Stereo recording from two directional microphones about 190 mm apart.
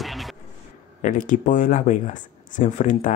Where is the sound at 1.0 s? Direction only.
45° left (ahead or behind).